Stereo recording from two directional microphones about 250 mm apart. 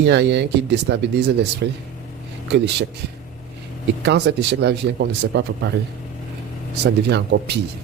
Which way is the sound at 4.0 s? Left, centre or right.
Right.